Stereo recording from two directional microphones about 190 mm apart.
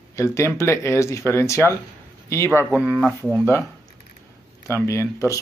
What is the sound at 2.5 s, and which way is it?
Speech, 10° right (ahead or behind).